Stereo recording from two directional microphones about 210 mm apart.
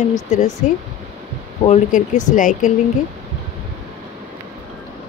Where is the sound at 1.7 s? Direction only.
35° left (ahead or behind).